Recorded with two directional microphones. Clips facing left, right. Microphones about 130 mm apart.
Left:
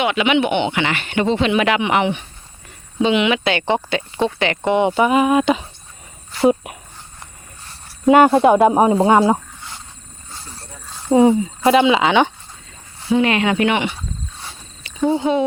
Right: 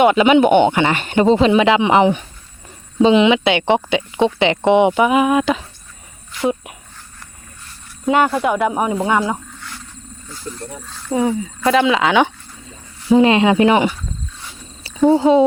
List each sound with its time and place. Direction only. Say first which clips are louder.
0.0 s speech: right 6 dB; 40° right (ahead or behind); by 4.9 s 20° right (ahead or behind)
4.9 s speech: even; 5° right (ahead or behind)
6.3 s a sound: left 4 dB; 30° left (ahead or behind)
8.2 s a woman's voice: left 6 dB; 25° left (ahead or behind)
10.9 s speech: left 6 dB; 25° left (ahead or behind)
11.7 s speech: left 1 dB; centre (ahead or behind)
13.1 s speech: right 5 dB; 30° right (ahead or behind)
15.1 s speech: right 6 dB; 35° right (ahead or behind)